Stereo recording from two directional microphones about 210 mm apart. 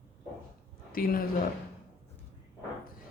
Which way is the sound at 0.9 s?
45° left (ahead or behind).